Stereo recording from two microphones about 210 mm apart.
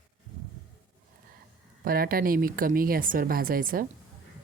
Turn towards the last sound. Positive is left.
turn(degrees=-40)  # may be behind; listen again after turning